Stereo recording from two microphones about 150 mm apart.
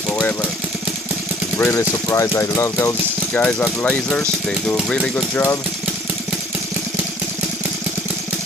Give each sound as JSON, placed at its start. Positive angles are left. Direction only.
{"t": 1.6, "sound": "speech", "side_deg": 15}